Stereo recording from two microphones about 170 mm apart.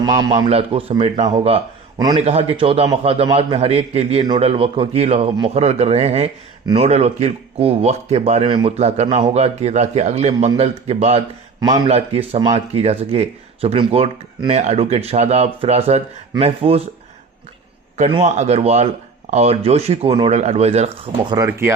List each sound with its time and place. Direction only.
0.0 s a man's voice: 20° right (ahead or behind)
0.4 s a man's voice: 35° right (ahead or behind)
11.6 s speech: 25° right (ahead or behind)
11.9 s a man's voice: 35° right (ahead or behind)
18.1 s a man's voice: 40° right (ahead or behind)
21.3 s speech: 20° right (ahead or behind)